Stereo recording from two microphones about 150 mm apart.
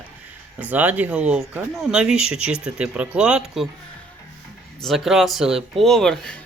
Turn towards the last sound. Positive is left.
turn(degrees=5)  # may be behind; listen again after turning